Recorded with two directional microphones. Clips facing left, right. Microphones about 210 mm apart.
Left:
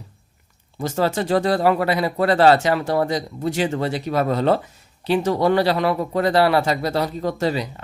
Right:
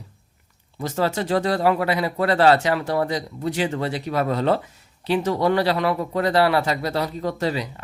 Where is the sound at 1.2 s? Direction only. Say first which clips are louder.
Left 2 dB; 50° left (ahead or behind); by 2.5 s 30° left (ahead or behind).